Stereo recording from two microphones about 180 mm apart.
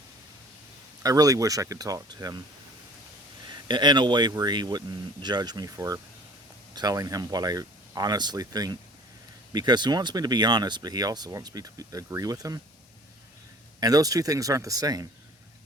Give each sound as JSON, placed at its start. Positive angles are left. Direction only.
{"t": 1.0, "sound": "speech", "side_deg": -20}
{"t": 3.5, "sound": "speech", "side_deg": -25}
{"t": 13.7, "sound": "speech", "side_deg": -20}